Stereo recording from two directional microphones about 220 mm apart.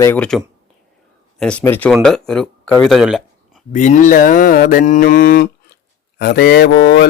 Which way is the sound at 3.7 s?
35° left (ahead or behind).